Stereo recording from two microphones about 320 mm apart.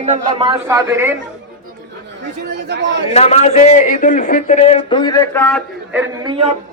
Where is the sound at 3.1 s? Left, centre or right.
Centre.